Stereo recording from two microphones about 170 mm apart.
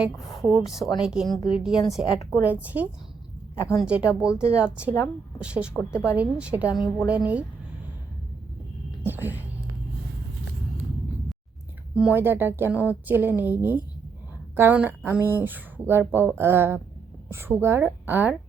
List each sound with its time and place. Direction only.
0.0 s a woman's voice: centre (ahead or behind)
4.3 s speech: 20° left (ahead or behind)
4.6 s a woman's voice: 5° right (ahead or behind)
9.0 s whispering: 10° right (ahead or behind)
11.9 s a woman's voice: 10° right (ahead or behind)